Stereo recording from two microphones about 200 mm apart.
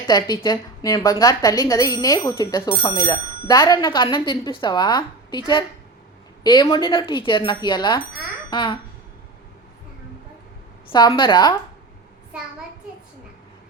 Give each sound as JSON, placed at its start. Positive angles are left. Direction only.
{"t": 0.1, "sound": "speech", "side_deg": 20}
{"t": 6.4, "sound": "speech", "side_deg": 20}
{"t": 10.9, "sound": "speech", "side_deg": 20}